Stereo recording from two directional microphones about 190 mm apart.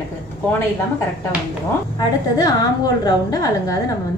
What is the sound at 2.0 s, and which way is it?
A woman's voice, 20° left (ahead or behind).